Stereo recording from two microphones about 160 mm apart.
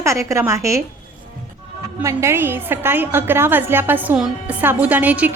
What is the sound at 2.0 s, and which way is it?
A woman's voice, 15° right (ahead or behind).